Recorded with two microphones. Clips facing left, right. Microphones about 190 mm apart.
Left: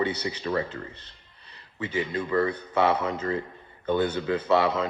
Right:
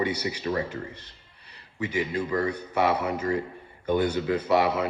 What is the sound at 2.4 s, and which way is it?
A man's voice, 10° right (ahead or behind).